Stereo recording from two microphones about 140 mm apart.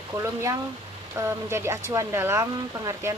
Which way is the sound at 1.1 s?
20° right (ahead or behind).